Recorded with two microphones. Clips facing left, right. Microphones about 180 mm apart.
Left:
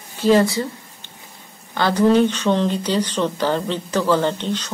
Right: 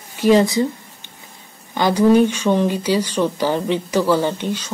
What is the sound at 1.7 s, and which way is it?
Speech, 10° right (ahead or behind).